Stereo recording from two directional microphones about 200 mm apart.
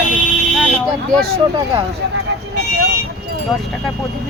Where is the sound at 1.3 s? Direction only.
25° right (ahead or behind).